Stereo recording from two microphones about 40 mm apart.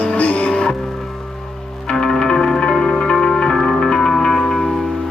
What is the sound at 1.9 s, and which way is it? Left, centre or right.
Music, centre.